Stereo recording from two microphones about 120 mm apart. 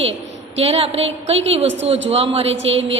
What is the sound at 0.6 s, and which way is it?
A woman's voice, 55° right (ahead or behind).